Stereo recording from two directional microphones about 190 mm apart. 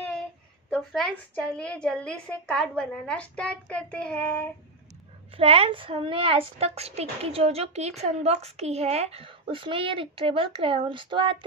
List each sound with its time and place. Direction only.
0.7 s a woman's voice: 5° left (ahead or behind)
5.4 s a child's voice: 30° right (ahead or behind)